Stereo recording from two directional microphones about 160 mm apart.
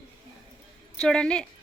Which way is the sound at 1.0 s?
5° left (ahead or behind).